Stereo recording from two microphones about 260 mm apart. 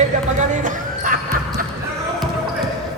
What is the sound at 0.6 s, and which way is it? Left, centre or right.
Basketball bounce, right.